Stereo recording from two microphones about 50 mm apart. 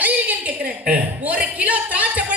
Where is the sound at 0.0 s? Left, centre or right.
Right.